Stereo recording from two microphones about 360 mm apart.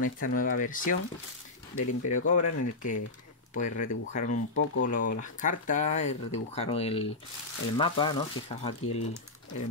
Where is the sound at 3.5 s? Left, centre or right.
Left.